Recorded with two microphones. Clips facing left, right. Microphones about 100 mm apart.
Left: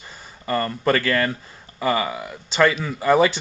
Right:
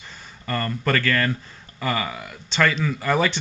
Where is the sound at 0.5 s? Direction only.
15° left (ahead or behind).